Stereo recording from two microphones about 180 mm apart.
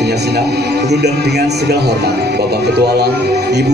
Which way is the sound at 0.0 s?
65° right (ahead or behind).